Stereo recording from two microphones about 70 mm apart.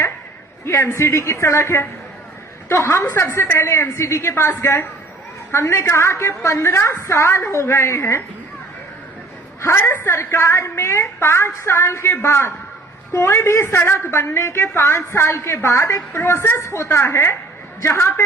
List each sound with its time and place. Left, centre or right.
0.6 s a woman's voice: left
9.6 s a woman's voice: left